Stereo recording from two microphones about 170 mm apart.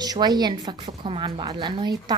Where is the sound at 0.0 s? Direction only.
25° right (ahead or behind).